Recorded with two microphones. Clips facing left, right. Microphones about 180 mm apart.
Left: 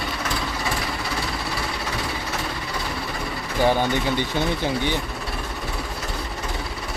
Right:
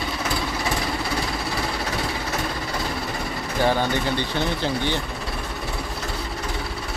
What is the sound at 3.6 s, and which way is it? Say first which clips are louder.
Speech: left 2 dB; 15° left (ahead or behind).